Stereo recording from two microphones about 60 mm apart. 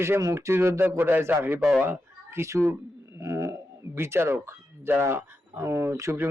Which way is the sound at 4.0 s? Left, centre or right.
Right.